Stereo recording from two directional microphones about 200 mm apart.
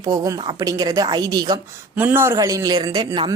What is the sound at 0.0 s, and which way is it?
A woman's voice, 20° right (ahead or behind).